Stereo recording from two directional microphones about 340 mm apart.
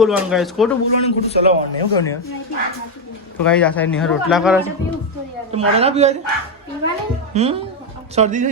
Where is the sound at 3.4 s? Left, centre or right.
Centre.